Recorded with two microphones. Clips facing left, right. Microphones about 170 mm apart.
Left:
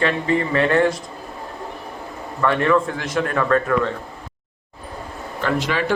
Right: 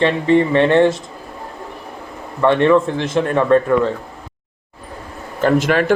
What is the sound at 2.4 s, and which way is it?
A man's voice, 25° right (ahead or behind).